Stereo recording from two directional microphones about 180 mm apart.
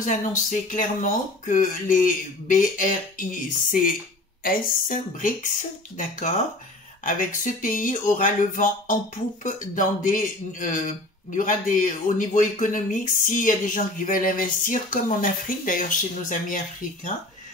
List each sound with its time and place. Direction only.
0.0 s speech: 45° left (ahead or behind)
4.4 s speech: 50° left (ahead or behind)